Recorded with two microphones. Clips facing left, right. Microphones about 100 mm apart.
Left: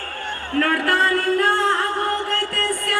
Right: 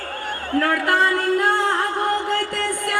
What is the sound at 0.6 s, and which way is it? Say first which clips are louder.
Music: even; 20° right (ahead or behind).